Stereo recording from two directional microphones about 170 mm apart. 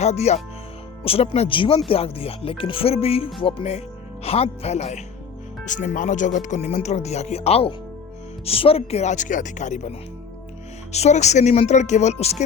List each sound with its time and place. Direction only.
0.0 s speech: 40° left (ahead or behind)
10.9 s speech: 40° left (ahead or behind)